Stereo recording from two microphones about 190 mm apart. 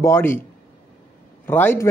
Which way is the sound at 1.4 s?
10° left (ahead or behind).